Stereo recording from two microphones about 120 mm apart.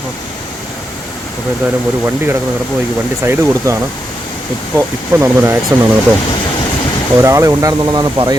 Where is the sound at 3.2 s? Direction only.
25° right (ahead or behind).